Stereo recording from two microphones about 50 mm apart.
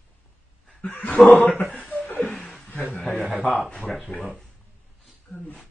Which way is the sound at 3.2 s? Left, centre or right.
Right.